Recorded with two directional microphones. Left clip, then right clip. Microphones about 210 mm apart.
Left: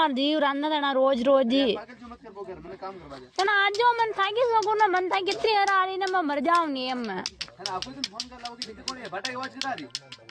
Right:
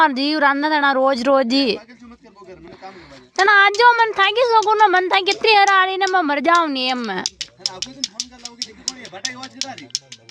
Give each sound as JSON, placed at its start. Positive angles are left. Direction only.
{"t": 0.0, "sound": "speech", "side_deg": -10}
{"t": 3.3, "sound": "speech", "side_deg": -15}
{"t": 7.3, "sound": "a sound", "side_deg": -50}
{"t": 8.9, "sound": "speech", "side_deg": -55}